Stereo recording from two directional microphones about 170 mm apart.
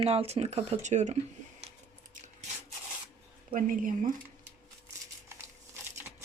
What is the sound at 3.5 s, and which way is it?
Speech, 55° right (ahead or behind).